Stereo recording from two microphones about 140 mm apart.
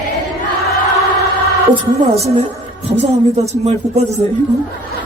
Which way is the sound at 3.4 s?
50° right (ahead or behind).